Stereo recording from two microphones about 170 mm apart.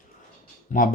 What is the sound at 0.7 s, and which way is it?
Speech, 55° left (ahead or behind).